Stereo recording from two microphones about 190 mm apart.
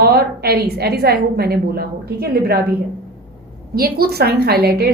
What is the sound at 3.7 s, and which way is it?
A woman's voice, 55° right (ahead or behind).